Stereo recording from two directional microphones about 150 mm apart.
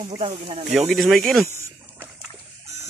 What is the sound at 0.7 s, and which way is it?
Speech, centre (ahead or behind).